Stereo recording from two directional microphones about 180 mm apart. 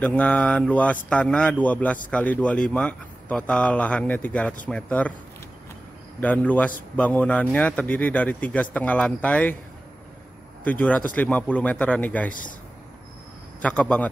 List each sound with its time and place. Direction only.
0.0 s a man's voice: 10° left (ahead or behind)
6.2 s a man's voice: 10° left (ahead or behind)
10.6 s a man's voice: 10° left (ahead or behind)
12.3 s a man's voice: 50° left (ahead or behind)
13.6 s a man's voice: 5° left (ahead or behind)